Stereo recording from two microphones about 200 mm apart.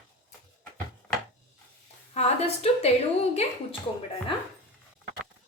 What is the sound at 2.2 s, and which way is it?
Speech, 35° left (ahead or behind).